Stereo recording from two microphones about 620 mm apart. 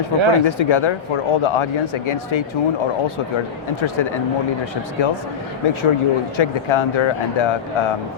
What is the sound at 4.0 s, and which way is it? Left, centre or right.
Speech, left.